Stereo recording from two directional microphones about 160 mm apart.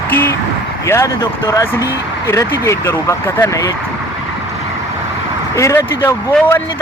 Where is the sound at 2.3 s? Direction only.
15° left (ahead or behind).